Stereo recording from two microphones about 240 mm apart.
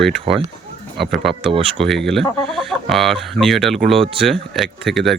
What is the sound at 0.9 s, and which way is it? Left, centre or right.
Speech, centre.